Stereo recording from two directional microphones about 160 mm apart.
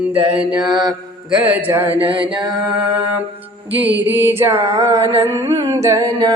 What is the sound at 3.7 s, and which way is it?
Mantra, 10° right (ahead or behind).